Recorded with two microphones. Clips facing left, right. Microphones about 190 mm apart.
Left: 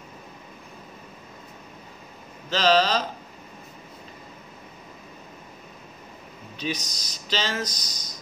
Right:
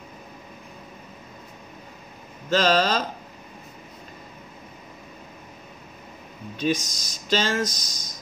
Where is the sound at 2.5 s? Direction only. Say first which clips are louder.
Even; 50° right (ahead or behind).